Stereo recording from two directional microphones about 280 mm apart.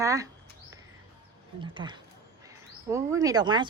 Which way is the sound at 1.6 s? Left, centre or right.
Centre.